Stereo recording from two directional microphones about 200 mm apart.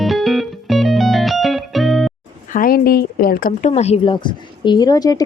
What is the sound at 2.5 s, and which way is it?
Speech, 45° left (ahead or behind).